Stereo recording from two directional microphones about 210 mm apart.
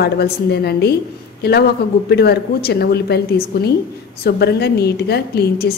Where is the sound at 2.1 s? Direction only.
50° left (ahead or behind).